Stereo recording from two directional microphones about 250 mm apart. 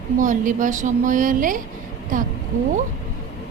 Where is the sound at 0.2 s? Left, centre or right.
Right.